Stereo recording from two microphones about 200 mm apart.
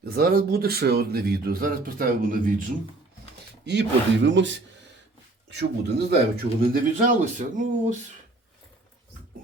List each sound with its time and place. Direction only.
0.0 s speech: 50° right (ahead or behind)
3.7 s speech: 60° right (ahead or behind)
5.5 s speech: 55° right (ahead or behind); by 7.9 s 40° right (ahead or behind)